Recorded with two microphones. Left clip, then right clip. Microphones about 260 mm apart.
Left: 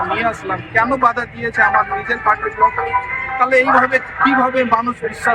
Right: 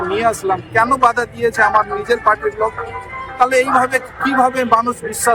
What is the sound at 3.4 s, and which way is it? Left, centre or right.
Speech, centre.